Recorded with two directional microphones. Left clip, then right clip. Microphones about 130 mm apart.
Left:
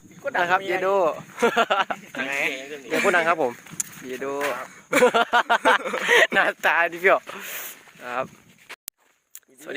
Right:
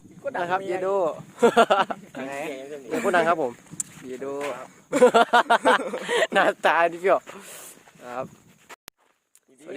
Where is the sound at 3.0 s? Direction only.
30° left (ahead or behind).